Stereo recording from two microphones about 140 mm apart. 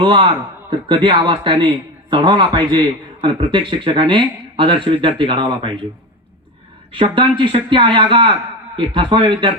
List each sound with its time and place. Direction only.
0.0 s a man's voice: 40° right (ahead or behind)
6.9 s a man's voice: 35° right (ahead or behind)